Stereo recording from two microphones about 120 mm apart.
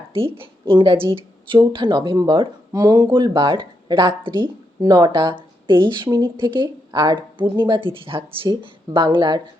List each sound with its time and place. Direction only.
0.3 s speech: 45° right (ahead or behind)